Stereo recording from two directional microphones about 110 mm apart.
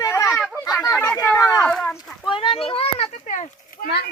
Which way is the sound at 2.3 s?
55° left (ahead or behind).